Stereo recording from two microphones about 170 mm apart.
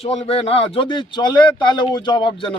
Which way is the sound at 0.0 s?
35° left (ahead or behind).